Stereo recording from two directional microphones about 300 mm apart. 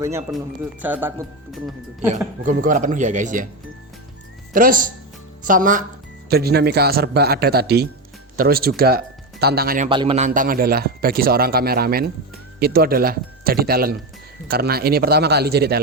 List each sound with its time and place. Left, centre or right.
0.0 s speech: centre
2.0 s a man's voice: right
4.5 s a man's voice: right